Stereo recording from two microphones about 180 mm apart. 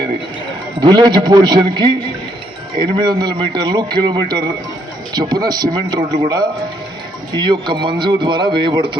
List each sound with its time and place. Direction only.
0.8 s a man's voice: 25° right (ahead or behind)